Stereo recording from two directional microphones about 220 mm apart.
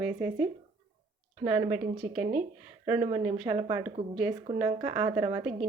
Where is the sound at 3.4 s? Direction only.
25° right (ahead or behind).